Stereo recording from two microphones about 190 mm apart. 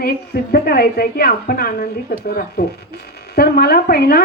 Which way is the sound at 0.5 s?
55° left (ahead or behind).